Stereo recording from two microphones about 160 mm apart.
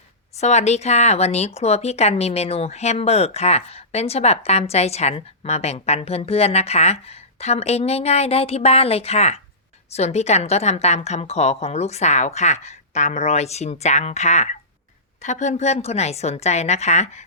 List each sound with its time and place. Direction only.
0.3 s a woman's voice: 45° left (ahead or behind)